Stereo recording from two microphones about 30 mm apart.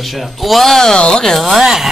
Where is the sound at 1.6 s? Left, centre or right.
Centre.